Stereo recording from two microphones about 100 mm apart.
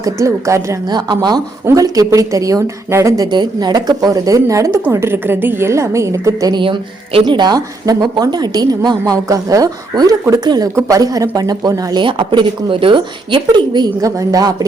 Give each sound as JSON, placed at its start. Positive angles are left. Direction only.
{"t": 0.0, "sound": "a woman's voice", "side_deg": -30}
{"t": 0.9, "sound": "a woman's voice", "side_deg": -45}
{"t": 3.2, "sound": "a woman's voice", "side_deg": -45}
{"t": 6.5, "sound": "a woman's voice", "side_deg": -60}
{"t": 12.0, "sound": "speech", "side_deg": -55}